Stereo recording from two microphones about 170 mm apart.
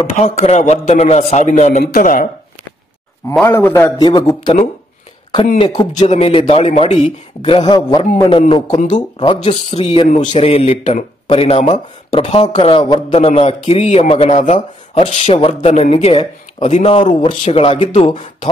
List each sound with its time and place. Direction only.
0.0 s a man's voice: 40° left (ahead or behind)
1.9 s a man's voice: 55° left (ahead or behind)
3.4 s a man's voice: 10° left (ahead or behind)
4.0 s a man's voice: 25° left (ahead or behind)
5.6 s a man's voice: 25° left (ahead or behind)
5.9 s a man's voice: 40° left (ahead or behind)